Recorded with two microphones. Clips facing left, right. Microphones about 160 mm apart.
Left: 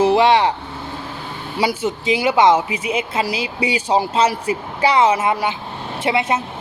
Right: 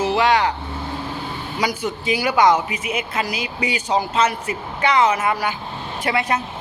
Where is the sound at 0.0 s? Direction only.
35° left (ahead or behind).